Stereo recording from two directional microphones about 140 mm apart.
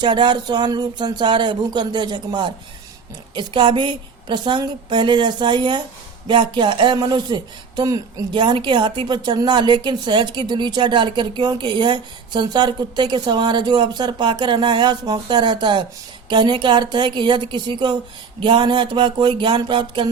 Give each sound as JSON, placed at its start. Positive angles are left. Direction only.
{"t": 0.0, "sound": "speech", "side_deg": -35}